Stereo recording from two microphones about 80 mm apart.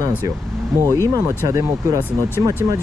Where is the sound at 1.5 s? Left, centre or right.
Right.